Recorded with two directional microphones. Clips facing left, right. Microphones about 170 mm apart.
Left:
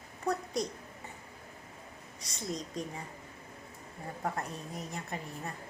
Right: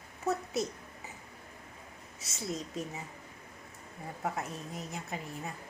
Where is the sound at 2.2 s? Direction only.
5° right (ahead or behind).